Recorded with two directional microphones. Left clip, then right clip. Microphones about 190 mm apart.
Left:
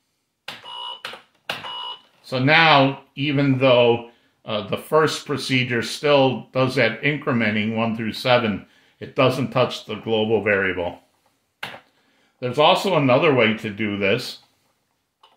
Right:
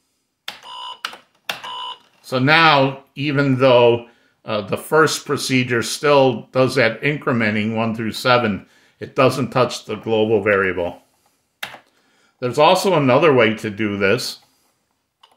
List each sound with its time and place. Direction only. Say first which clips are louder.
2.2 s speech: right 2 dB; 40° right (ahead or behind)
12.4 s speech: right 3 dB; 40° right (ahead or behind)